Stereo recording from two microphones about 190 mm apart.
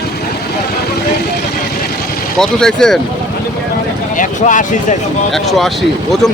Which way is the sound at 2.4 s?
5° left (ahead or behind).